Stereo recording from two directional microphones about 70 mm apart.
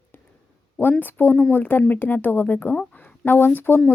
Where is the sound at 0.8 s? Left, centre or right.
Left.